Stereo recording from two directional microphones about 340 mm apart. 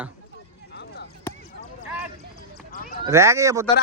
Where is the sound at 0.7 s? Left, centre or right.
Left.